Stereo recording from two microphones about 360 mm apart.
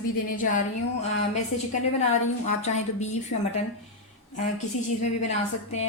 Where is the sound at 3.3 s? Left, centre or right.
Left.